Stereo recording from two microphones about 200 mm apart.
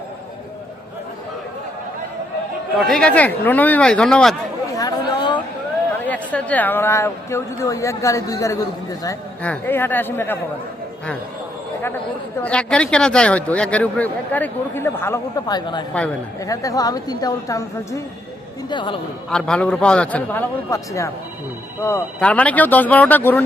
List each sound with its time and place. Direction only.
2.8 s a man's voice: 5° left (ahead or behind)
4.8 s chatter: 20° left (ahead or behind)
6.1 s speech: 10° left (ahead or behind)
12.4 s a man's voice: 5° left (ahead or behind); by 18.9 s 25° left (ahead or behind)
19.3 s a man's voice: 5° left (ahead or behind)